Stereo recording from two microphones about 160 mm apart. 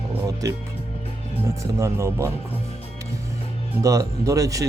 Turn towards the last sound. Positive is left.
turn(degrees=-20)  # may be behind; listen again after turning